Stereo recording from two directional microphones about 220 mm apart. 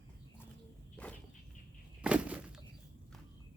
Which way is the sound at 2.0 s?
5° right (ahead or behind).